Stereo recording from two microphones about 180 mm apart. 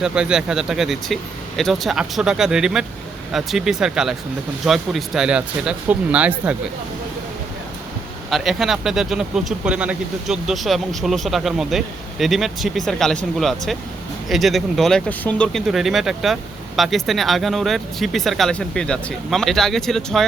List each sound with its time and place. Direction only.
0.0 s speech: 5° right (ahead or behind)
8.3 s speech: centre (ahead or behind)